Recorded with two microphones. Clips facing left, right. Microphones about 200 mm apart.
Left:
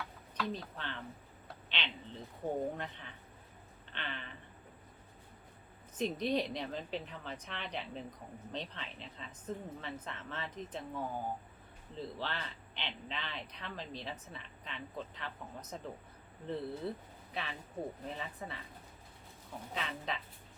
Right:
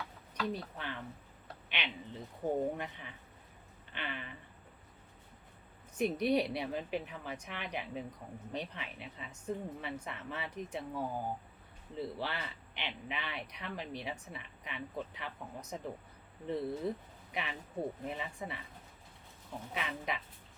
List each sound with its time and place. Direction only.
0.3 s speech: 10° right (ahead or behind)
6.0 s speech: 10° right (ahead or behind)
19.7 s speech: 15° right (ahead or behind)